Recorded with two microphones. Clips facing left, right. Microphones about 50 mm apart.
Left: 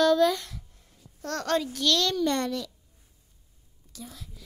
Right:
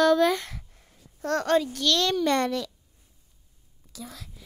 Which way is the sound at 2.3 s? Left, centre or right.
Right.